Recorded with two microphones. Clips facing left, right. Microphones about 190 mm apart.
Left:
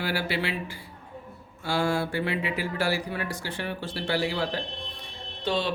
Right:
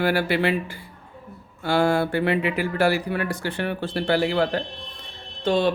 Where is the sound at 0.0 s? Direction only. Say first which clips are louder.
Right 8 dB; 55° right (ahead or behind).